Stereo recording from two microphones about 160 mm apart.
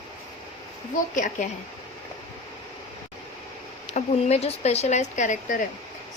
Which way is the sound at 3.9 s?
40° left (ahead or behind).